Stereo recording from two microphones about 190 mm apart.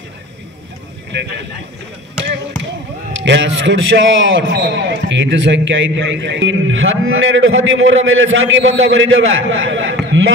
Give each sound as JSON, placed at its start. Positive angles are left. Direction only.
{"t": 1.1, "sound": "speech", "side_deg": -70}
{"t": 3.2, "sound": "a man's voice", "side_deg": -70}